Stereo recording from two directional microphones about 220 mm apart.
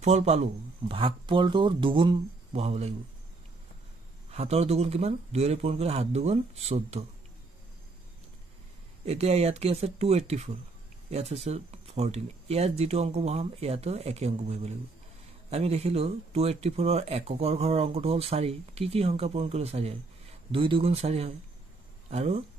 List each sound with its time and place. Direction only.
0.0 s speech: 30° right (ahead or behind)
4.3 s speech: 30° right (ahead or behind)
9.0 s speech: 30° right (ahead or behind)